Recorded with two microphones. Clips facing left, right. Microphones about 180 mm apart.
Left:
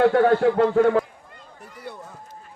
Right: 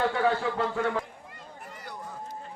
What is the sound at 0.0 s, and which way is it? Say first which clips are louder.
A man's voice: left 9 dB; 65° left (ahead or behind).